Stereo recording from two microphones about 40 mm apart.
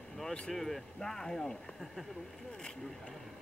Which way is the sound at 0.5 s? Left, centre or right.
Centre.